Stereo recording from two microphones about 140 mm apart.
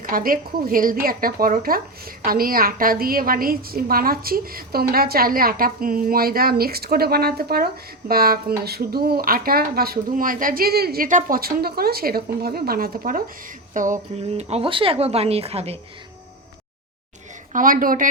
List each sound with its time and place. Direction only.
0.0 s speech: 90° right; by 14.0 s 65° right (ahead or behind)
14.2 s speech: 50° right (ahead or behind)
17.5 s a woman's voice: 80° right